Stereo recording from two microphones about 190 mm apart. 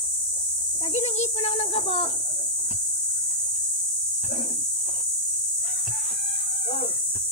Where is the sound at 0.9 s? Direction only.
35° left (ahead or behind).